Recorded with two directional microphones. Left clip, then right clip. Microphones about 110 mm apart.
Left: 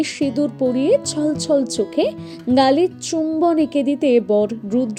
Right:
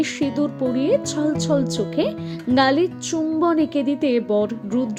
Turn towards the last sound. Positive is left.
turn(degrees=30)  # may be behind; listen again after turning